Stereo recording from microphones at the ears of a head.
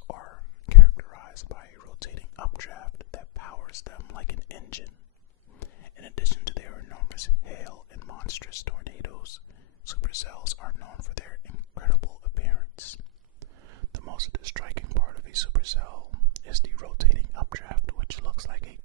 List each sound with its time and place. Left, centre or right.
0.0 s whispering: left
5.6 s speech: left
13.4 s whispering: right